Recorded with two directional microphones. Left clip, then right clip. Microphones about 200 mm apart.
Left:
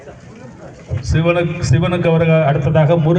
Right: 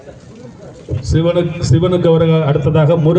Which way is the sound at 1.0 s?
55° right (ahead or behind).